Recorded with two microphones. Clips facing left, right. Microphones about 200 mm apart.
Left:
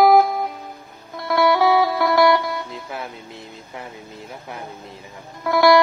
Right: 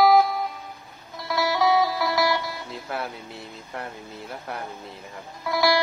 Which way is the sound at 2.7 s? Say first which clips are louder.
Even; centre (ahead or behind).